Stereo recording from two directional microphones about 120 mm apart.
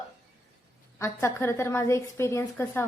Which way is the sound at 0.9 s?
20° left (ahead or behind).